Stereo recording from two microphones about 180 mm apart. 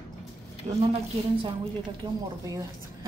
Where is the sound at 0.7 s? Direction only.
40° right (ahead or behind).